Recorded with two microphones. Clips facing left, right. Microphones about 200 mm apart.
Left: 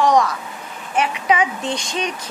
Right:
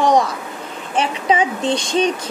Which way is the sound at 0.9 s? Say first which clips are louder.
Right 1 dB; 30° right (ahead or behind).